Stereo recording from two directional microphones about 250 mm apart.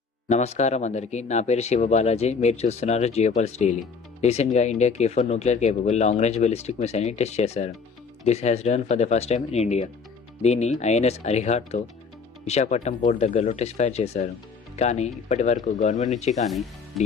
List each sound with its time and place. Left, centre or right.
0.3 s speech: left
16.3 s speech: centre